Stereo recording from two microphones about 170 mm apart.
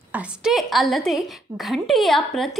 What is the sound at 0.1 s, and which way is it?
A woman's voice, 5° right (ahead or behind).